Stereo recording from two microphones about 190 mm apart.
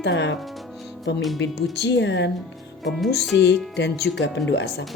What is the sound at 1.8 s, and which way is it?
Speech, 65° left (ahead or behind).